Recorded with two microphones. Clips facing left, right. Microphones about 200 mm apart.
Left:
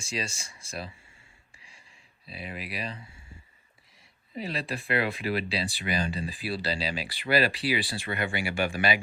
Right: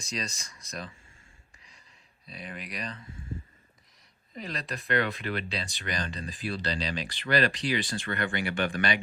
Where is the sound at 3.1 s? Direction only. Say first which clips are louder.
Right 11 dB; 50° right (ahead or behind).